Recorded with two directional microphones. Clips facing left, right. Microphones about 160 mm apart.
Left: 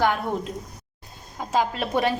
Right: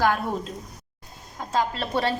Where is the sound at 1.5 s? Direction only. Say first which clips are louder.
Left 2 dB; 15° left (ahead or behind).